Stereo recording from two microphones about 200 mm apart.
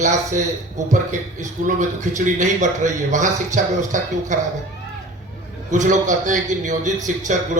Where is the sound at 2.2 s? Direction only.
40° right (ahead or behind).